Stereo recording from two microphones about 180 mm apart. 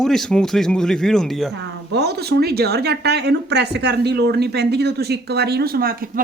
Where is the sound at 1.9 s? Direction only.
65° right (ahead or behind).